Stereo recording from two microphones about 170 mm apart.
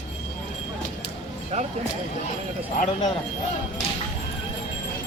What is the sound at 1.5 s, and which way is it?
Music, 40° right (ahead or behind).